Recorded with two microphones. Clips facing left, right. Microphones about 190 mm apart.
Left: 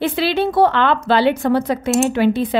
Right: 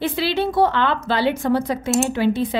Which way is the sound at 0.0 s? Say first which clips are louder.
Left 3 dB; 60° left (ahead or behind).